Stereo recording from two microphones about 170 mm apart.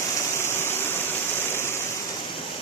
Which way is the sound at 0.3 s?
15° left (ahead or behind).